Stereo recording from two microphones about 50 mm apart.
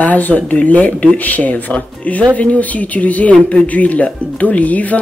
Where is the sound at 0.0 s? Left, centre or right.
Left.